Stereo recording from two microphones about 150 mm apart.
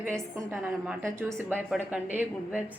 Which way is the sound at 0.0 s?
15° right (ahead or behind).